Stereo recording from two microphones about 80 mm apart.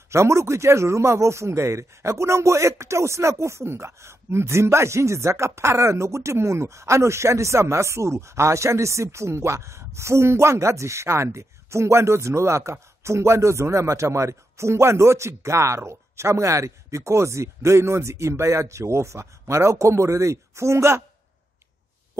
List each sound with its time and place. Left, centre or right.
0.1 s a man's voice: right